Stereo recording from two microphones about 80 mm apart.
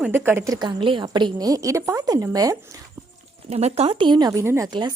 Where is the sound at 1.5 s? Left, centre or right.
Right.